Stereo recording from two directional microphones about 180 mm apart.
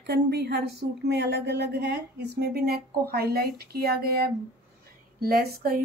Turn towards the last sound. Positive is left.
turn(degrees=-55)  # may be behind; listen again after turning